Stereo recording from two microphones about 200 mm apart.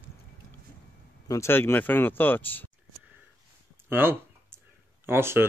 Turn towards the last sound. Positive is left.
turn(degrees=-10)  # may be behind; listen again after turning